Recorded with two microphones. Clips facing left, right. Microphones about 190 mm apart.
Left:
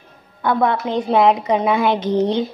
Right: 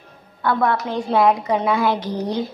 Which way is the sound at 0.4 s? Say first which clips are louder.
Left 2 dB; 20° left (ahead or behind).